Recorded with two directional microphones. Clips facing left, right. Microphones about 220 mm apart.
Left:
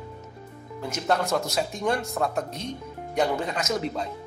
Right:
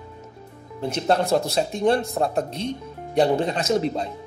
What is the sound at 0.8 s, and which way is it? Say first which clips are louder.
Speech: right 4 dB; 30° right (ahead or behind).